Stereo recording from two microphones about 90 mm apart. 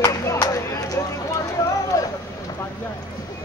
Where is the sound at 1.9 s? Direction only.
40° left (ahead or behind).